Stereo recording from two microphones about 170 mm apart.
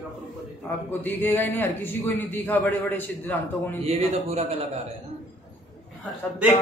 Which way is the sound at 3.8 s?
40° right (ahead or behind).